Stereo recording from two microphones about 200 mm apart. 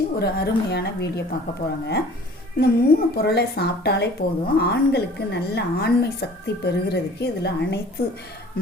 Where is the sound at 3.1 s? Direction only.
55° left (ahead or behind).